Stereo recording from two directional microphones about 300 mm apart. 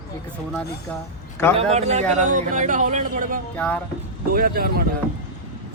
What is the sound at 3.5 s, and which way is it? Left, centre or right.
Speech, centre.